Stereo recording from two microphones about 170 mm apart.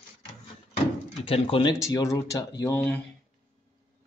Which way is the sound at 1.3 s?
30° left (ahead or behind).